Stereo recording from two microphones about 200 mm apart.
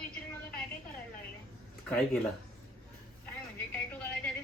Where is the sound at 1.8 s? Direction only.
5° left (ahead or behind).